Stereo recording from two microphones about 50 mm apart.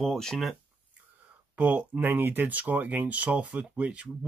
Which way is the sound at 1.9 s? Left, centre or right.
Right.